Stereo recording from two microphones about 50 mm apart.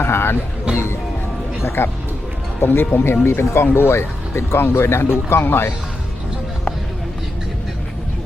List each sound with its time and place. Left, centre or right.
0.0 s music: left
0.7 s speech: right
1.6 s speech: left